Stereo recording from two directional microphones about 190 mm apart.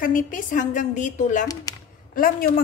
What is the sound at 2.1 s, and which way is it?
Speech, 50° left (ahead or behind).